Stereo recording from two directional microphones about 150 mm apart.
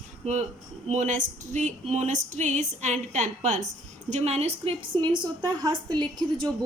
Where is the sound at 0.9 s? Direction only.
55° right (ahead or behind).